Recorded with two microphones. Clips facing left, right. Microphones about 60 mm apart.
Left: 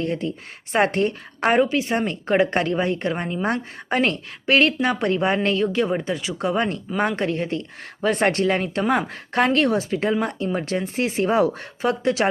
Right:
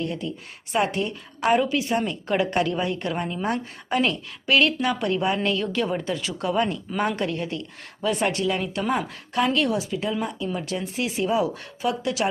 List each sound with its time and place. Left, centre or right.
0.0 s a woman's voice: left
8.0 s speech: left